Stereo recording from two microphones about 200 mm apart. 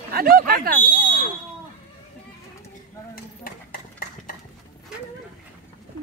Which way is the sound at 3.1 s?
45° left (ahead or behind).